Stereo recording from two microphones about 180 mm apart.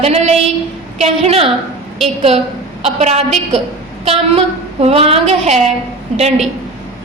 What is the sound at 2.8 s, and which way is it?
Speech, 35° right (ahead or behind).